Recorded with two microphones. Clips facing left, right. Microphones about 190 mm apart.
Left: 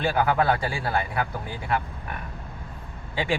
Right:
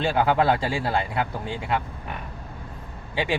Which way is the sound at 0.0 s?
25° right (ahead or behind).